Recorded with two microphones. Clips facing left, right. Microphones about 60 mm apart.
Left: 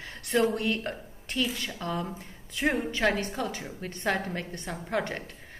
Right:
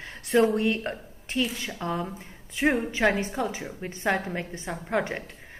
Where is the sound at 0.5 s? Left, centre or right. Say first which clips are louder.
Right 4 dB; right.